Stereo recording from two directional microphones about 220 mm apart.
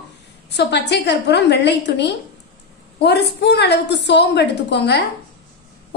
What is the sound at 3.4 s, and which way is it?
A woman's voice, 50° left (ahead or behind).